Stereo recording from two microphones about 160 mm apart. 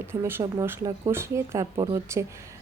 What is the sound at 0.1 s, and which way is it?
A woman's voice, 15° right (ahead or behind).